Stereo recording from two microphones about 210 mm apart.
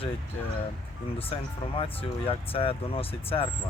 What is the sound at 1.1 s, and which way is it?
Speech, 25° left (ahead or behind).